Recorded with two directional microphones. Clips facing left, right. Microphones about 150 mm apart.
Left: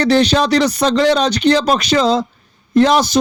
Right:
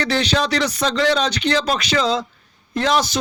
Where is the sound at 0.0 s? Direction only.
40° left (ahead or behind).